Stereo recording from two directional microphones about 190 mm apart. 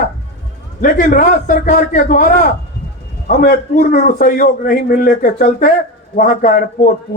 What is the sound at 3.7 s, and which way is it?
A man's voice, 45° left (ahead or behind).